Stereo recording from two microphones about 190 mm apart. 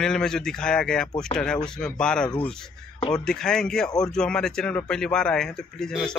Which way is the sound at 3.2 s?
5° left (ahead or behind).